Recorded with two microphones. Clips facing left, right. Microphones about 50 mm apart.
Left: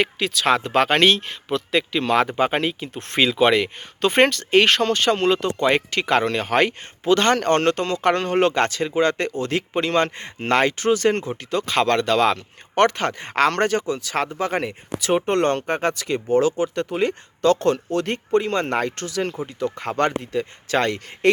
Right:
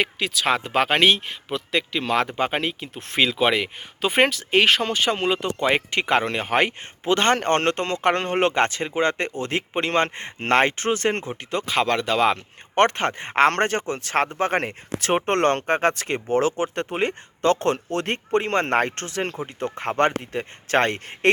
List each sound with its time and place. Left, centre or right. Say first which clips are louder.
0.0 s speech: left 2 dB; centre
5.9 s speech: left 1 dB; right
11.6 s speech: left 2 dB; centre
12.7 s speech: left 1 dB; right